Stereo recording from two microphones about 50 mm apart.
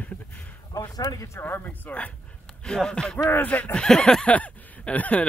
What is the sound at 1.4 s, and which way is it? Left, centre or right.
Speech, left.